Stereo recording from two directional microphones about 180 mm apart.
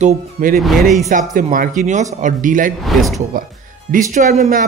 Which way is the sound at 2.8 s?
Centre (ahead or behind).